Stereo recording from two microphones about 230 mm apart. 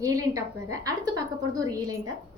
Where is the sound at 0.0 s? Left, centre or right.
Centre.